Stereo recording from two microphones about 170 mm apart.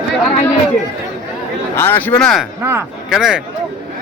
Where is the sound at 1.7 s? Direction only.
10° left (ahead or behind).